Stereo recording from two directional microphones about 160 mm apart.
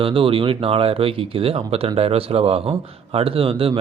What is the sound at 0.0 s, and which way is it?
A man's voice, 35° right (ahead or behind).